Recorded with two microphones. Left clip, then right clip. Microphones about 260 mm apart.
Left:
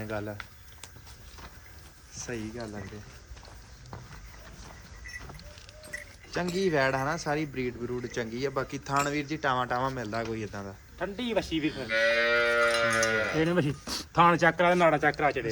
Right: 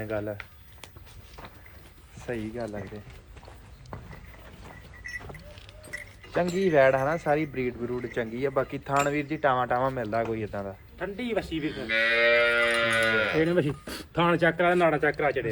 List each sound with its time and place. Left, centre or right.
0.0 s a sound: centre
2.1 s speech: centre
6.3 s speech: centre
10.9 s speech: left
11.9 s speech: right
13.4 s speech: left